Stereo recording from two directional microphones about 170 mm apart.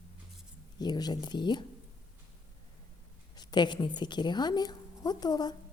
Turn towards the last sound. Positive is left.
turn(degrees=25)  # may be behind; listen again after turning